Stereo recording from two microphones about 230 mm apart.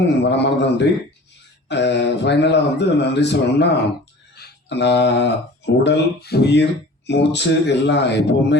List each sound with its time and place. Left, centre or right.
0.2 s speech: left